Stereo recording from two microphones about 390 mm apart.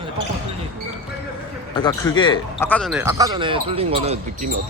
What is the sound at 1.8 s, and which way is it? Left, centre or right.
A man's voice, centre.